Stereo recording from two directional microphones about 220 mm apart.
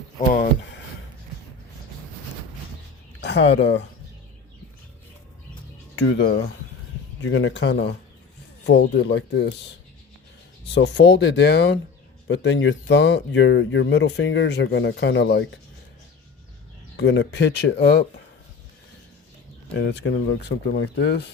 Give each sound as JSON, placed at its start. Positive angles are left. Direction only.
{"t": 3.2, "sound": "speech", "side_deg": 55}
{"t": 6.0, "sound": "speech", "side_deg": 55}
{"t": 10.8, "sound": "speech", "side_deg": 55}
{"t": 17.0, "sound": "speech", "side_deg": 50}
{"t": 19.7, "sound": "speech", "side_deg": 50}